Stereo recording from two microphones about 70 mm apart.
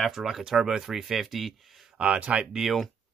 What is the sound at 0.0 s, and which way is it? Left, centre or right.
Speech, centre.